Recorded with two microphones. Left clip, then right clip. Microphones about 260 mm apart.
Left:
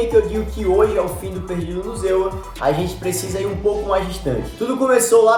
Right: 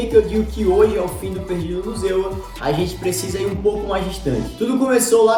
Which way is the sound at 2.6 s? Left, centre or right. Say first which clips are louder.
Left 1 dB; left.